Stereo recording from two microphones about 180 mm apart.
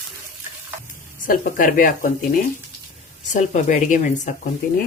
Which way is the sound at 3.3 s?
40° left (ahead or behind).